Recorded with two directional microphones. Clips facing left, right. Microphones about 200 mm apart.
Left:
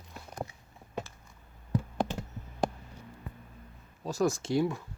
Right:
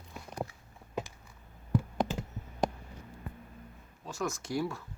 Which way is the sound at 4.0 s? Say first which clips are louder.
Left 7 dB; 35° left (ahead or behind).